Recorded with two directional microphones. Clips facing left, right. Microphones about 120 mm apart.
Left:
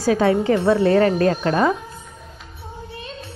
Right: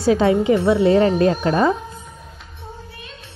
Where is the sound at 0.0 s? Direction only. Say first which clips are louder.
Right 1 dB; 25° right (ahead or behind).